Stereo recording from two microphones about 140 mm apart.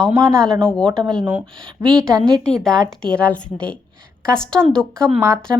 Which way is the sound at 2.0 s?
5° left (ahead or behind).